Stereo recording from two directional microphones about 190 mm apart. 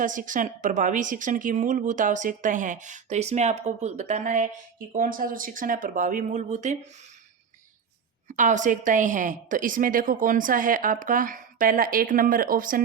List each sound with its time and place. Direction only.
0.0 s a woman's voice: 45° right (ahead or behind)
8.3 s a woman's voice: 40° right (ahead or behind)